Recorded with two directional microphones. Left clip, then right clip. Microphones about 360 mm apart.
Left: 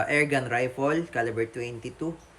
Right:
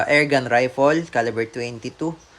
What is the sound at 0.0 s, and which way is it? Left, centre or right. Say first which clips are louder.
Speech: right 7 dB; centre.